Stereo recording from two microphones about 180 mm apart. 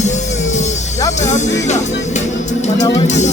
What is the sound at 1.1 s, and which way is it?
Speech, 40° left (ahead or behind).